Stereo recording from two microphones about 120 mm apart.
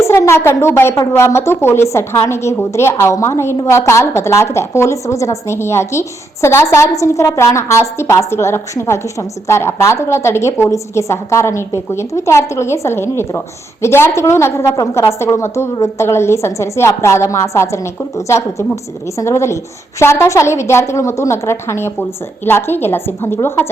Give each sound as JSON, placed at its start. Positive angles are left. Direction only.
{"t": 0.0, "sound": "a woman's voice", "side_deg": 25}